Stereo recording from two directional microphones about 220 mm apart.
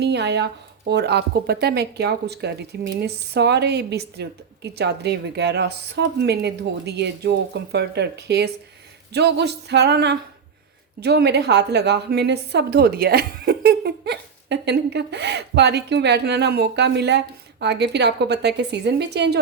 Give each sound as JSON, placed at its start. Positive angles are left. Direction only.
{"t": 0.0, "sound": "speech", "side_deg": -50}